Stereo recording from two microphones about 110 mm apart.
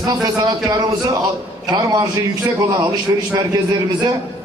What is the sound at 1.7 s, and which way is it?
A man's voice, 35° right (ahead or behind).